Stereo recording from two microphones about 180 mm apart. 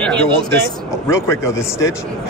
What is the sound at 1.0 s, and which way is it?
Speech, 15° left (ahead or behind).